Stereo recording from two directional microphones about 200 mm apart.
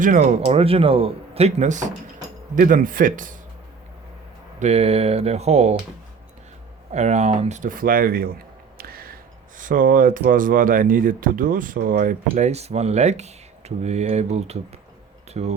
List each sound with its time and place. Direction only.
0.0 s speech: 40° right (ahead or behind)
4.6 s speech: 30° right (ahead or behind)
6.9 s speech: 35° right (ahead or behind)
8.8 s a sound: 50° right (ahead or behind)
9.6 s speech: 40° right (ahead or behind)
12.3 s speech: 30° right (ahead or behind)